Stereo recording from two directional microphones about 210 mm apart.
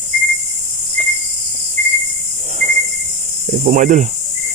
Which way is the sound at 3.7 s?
35° right (ahead or behind).